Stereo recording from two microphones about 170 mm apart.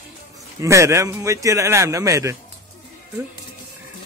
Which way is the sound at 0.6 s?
15° right (ahead or behind).